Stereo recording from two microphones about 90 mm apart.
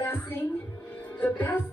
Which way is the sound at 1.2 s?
20° left (ahead or behind).